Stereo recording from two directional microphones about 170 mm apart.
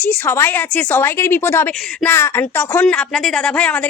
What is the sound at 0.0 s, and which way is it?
A woman's voice, 10° left (ahead or behind).